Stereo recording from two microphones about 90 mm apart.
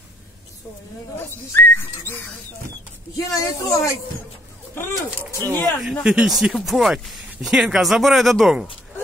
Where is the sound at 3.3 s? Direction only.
40° left (ahead or behind).